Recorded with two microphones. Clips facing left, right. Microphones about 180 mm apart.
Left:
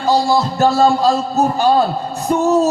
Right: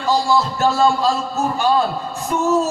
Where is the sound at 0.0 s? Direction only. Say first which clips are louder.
Left 3 dB; 40° left (ahead or behind).